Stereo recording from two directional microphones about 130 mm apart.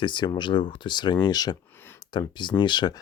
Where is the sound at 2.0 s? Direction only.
35° left (ahead or behind).